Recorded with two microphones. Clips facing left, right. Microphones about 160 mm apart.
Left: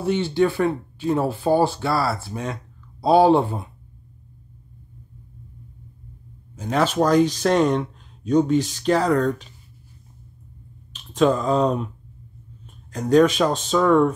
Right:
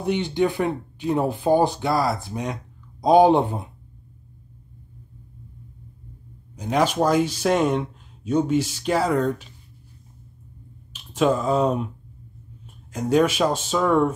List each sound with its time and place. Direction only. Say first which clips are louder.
0.0 s speech: left 2 dB; 15° right (ahead or behind)
6.5 s speech: even; 15° right (ahead or behind)
10.9 s speech: left 2 dB; 10° right (ahead or behind)